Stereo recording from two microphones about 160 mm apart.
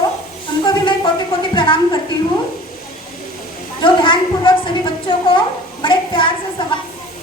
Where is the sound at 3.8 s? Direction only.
30° left (ahead or behind).